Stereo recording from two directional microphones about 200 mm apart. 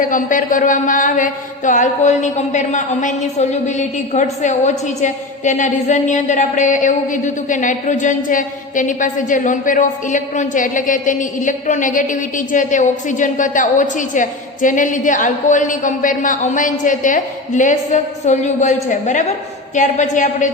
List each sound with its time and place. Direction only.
0.0 s a man's voice: 40° left (ahead or behind)